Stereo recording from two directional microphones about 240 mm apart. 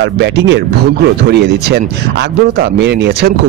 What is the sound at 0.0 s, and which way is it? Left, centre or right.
Speech, right.